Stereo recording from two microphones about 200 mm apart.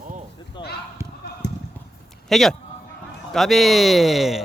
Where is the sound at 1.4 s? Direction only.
60° left (ahead or behind).